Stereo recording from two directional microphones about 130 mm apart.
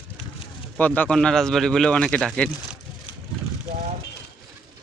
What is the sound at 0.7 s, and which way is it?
Speech, 10° left (ahead or behind).